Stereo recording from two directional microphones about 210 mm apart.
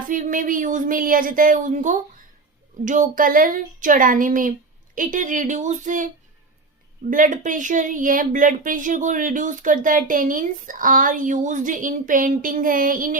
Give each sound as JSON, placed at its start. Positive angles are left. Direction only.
{"t": 0.1, "sound": "speech", "side_deg": -40}
{"t": 7.1, "sound": "speech", "side_deg": -40}